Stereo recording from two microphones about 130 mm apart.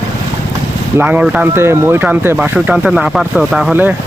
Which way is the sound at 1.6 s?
20° right (ahead or behind).